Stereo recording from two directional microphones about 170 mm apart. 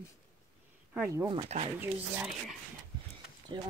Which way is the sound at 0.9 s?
15° right (ahead or behind).